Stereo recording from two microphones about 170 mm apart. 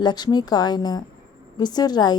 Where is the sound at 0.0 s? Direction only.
25° left (ahead or behind).